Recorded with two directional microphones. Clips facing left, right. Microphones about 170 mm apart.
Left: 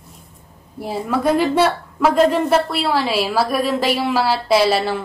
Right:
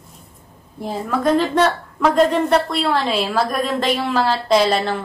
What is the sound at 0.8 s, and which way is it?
A woman's voice, 10° left (ahead or behind).